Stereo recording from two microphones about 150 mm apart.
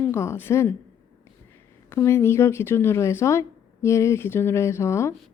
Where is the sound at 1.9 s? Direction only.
15° left (ahead or behind).